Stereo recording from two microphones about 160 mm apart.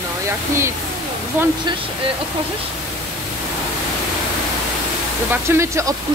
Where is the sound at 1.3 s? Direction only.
15° right (ahead or behind).